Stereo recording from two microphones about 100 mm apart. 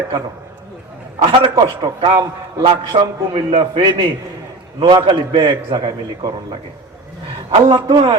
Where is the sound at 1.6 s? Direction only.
55° right (ahead or behind).